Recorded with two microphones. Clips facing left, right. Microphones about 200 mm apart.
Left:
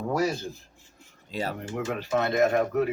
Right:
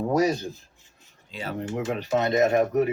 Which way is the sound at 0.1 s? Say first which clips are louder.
Right 3 dB; 20° right (ahead or behind).